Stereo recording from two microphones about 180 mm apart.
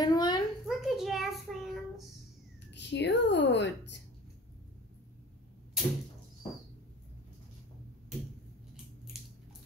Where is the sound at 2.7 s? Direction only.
75° left (ahead or behind).